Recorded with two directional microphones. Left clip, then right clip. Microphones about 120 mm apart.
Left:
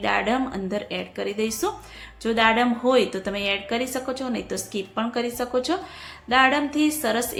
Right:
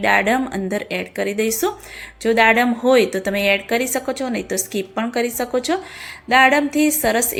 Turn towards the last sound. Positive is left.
turn(degrees=-35)  # may be behind; listen again after turning